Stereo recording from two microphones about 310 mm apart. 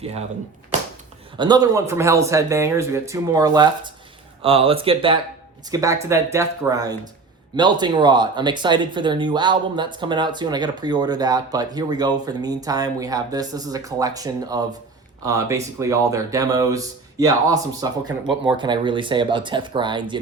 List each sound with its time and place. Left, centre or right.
0.0 s speech: centre
0.7 s a sound: right
1.4 s speech: centre